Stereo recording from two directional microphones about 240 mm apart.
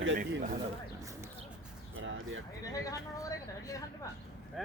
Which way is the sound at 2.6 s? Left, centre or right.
Centre.